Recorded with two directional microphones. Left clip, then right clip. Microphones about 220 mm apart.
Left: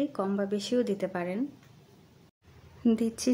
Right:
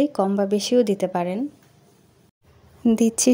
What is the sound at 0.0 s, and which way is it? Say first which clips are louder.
Speech: right 10 dB; 25° right (ahead or behind).